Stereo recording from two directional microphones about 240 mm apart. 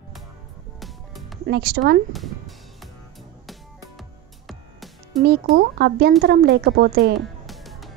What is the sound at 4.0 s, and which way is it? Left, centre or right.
Music, centre.